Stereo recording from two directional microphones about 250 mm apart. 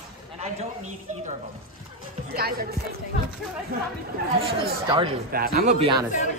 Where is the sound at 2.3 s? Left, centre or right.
Right.